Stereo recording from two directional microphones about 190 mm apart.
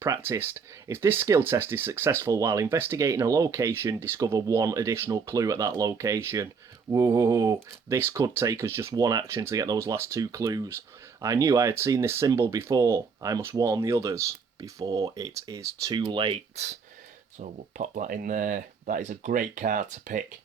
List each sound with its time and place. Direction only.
0.0 s speech: 15° right (ahead or behind); by 20.2 s 45° right (ahead or behind)